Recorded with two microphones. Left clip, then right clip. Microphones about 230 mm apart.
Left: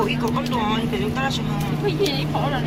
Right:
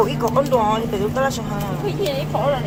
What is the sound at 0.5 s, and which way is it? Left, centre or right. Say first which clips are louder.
Speech: right 6 dB; right.